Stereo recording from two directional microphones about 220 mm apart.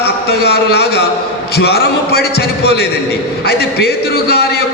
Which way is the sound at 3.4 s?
45° left (ahead or behind).